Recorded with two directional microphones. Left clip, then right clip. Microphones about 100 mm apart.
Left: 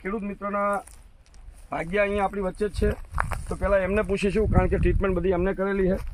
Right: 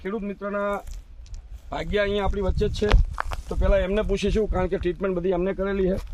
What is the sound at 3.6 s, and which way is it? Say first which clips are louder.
Speech: even; 20° right (ahead or behind).